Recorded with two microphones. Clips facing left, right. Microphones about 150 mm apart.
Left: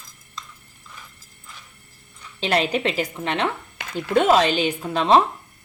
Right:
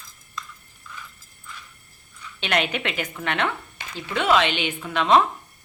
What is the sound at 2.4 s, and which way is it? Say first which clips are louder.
Speech: left 4 dB; 35° left (ahead or behind).